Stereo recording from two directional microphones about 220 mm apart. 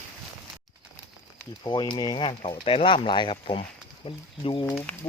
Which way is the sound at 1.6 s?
20° left (ahead or behind).